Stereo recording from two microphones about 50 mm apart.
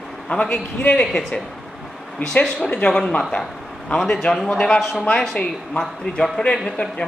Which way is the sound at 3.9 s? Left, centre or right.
Centre.